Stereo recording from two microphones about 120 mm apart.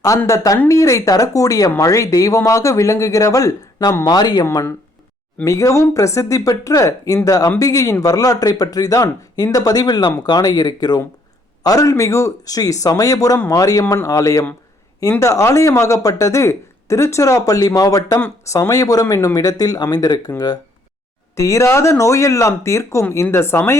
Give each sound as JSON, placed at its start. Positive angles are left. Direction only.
{"t": 0.3, "sound": "speech", "side_deg": 30}
{"t": 5.5, "sound": "speech", "side_deg": 25}
{"t": 21.3, "sound": "speech", "side_deg": 25}